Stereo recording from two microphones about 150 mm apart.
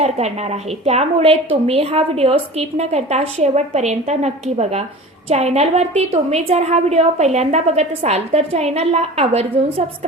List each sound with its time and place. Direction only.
0.0 s a woman's voice: 45° right (ahead or behind)